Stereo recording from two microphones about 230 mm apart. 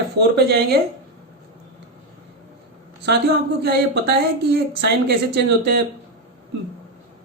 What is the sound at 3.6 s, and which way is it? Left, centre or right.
Speech, right.